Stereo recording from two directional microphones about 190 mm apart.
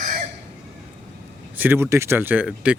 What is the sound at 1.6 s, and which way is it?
Speech, 10° right (ahead or behind).